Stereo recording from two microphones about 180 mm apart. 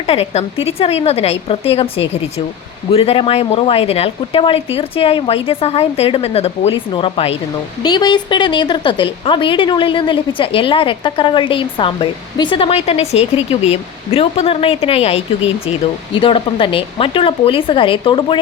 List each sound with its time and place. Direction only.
0.0 s a woman's voice: 35° left (ahead or behind)